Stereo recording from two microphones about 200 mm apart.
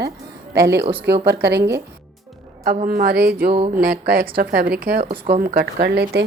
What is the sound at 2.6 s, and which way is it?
Speech, 45° right (ahead or behind).